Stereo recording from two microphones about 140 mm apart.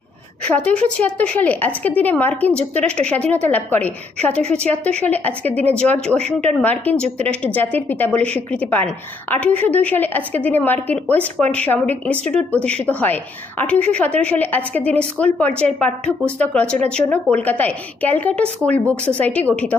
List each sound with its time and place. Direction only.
0.4 s a woman's voice: 10° left (ahead or behind)